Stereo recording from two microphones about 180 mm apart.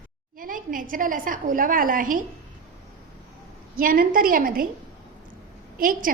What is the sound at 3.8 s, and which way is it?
Speech, 50° right (ahead or behind).